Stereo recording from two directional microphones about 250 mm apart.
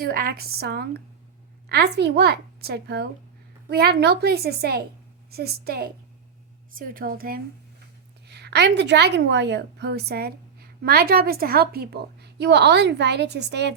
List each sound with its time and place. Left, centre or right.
0.0 s a woman's voice: right